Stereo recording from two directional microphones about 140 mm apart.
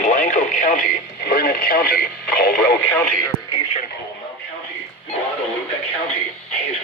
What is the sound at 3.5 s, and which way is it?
Radio, 45° left (ahead or behind).